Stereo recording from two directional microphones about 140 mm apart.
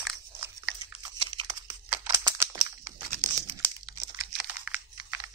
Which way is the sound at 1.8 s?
15° right (ahead or behind).